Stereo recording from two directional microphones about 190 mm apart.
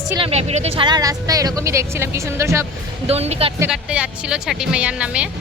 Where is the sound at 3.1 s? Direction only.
35° right (ahead or behind).